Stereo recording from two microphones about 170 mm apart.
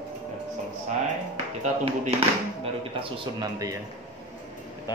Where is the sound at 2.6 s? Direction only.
30° right (ahead or behind).